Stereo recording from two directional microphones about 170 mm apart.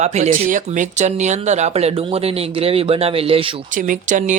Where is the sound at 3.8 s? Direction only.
50° right (ahead or behind).